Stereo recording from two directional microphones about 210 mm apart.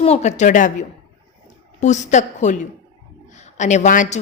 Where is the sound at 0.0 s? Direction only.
30° left (ahead or behind).